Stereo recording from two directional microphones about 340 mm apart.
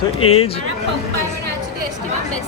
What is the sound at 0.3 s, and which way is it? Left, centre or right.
Speech, centre.